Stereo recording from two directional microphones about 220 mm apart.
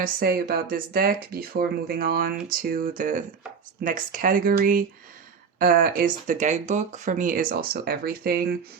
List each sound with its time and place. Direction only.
0.0 s speech: 45° right (ahead or behind)